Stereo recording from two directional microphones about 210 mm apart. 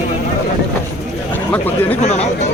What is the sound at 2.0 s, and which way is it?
Speech, 35° left (ahead or behind).